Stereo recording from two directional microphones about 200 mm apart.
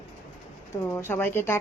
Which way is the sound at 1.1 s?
10° left (ahead or behind).